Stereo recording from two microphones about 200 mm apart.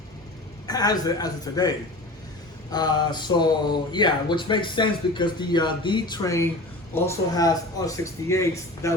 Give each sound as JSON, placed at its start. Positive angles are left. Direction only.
{"t": 0.7, "sound": "speech", "side_deg": 20}
{"t": 2.7, "sound": "speech", "side_deg": 20}